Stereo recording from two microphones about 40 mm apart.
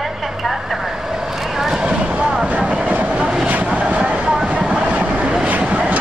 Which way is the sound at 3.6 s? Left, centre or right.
Right.